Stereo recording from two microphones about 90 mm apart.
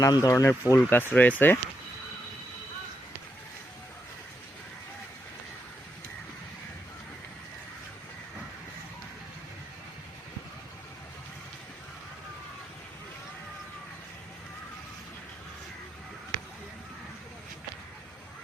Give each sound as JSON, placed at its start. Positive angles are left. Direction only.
{"t": 0.0, "sound": "speech", "side_deg": 40}